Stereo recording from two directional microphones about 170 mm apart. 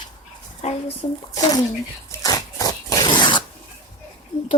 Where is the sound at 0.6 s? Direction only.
40° left (ahead or behind).